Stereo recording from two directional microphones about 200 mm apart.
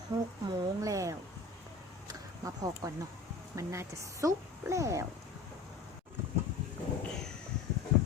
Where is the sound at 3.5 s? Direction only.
15° right (ahead or behind).